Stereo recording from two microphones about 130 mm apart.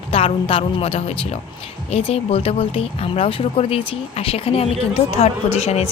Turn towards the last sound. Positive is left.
turn(degrees=55)  # may be behind; listen again after turning